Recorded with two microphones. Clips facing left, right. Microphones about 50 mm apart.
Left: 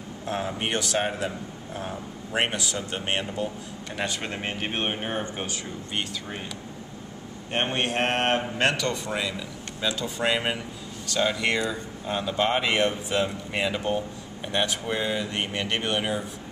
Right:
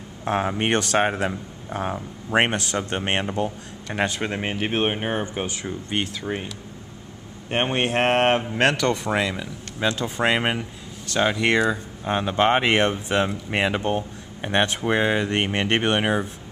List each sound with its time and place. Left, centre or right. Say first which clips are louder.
0.2 s speech: right 6 dB; right
2.5 s speech: right 5 dB; right
4.2 s speech: right 5 dB; centre
7.5 s speech: right 4 dB; centre
8.8 s speech: right 6 dB; right